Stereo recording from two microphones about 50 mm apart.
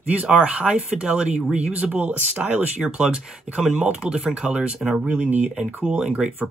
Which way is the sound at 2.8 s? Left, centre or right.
Centre.